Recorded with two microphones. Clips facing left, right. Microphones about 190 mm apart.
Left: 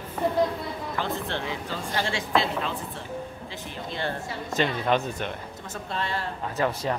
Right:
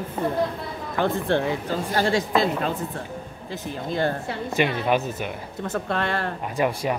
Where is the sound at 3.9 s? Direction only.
45° right (ahead or behind).